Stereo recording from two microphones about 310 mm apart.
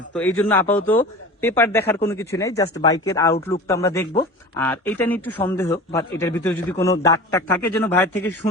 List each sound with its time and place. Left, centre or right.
0.1 s a man's voice: centre